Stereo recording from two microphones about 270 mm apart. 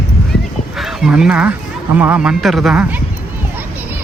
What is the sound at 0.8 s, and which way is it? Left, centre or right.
Speech, centre.